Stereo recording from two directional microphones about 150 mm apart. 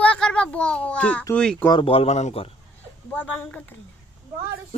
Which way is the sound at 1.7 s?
35° left (ahead or behind).